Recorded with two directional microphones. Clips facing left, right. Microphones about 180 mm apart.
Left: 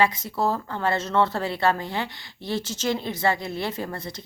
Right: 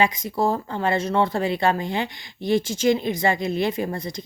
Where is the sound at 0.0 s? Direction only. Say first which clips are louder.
Right 2 dB; 15° right (ahead or behind).